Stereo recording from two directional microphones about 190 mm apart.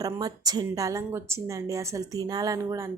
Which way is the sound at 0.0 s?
20° right (ahead or behind).